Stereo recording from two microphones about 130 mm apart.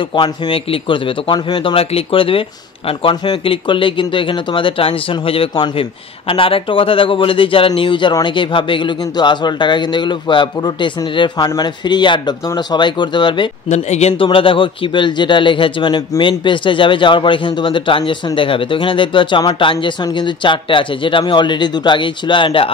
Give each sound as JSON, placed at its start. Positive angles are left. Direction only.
{"t": 0.1, "sound": "speech", "side_deg": 40}
{"t": 13.7, "sound": "speech", "side_deg": 60}
{"t": 14.1, "sound": "speech", "side_deg": 40}